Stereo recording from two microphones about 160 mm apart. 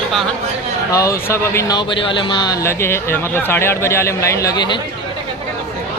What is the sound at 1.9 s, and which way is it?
Speech, 30° left (ahead or behind).